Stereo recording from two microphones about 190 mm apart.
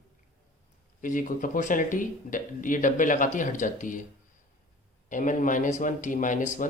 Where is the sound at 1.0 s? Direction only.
45° left (ahead or behind).